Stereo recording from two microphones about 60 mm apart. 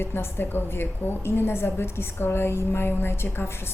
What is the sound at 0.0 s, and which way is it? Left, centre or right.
A woman's voice, left.